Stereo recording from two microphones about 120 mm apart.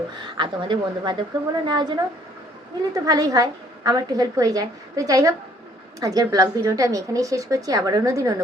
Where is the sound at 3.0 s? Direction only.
30° right (ahead or behind).